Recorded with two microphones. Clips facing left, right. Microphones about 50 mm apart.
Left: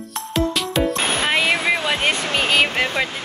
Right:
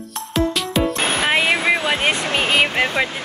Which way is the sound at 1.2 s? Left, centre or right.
Centre.